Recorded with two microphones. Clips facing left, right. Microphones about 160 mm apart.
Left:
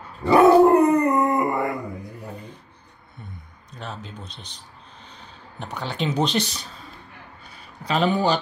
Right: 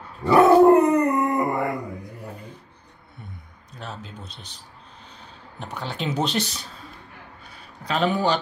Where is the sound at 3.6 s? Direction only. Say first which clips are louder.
Left 1 dB; 5° right (ahead or behind).